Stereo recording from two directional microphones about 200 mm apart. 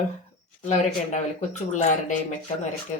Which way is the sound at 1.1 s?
35° left (ahead or behind).